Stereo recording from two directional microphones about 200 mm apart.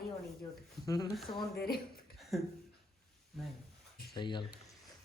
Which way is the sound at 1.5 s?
50° left (ahead or behind).